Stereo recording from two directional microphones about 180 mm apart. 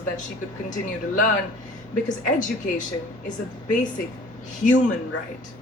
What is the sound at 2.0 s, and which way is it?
Speech, 45° left (ahead or behind).